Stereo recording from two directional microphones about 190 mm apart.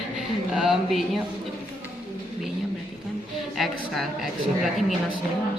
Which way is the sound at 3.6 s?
Centre (ahead or behind).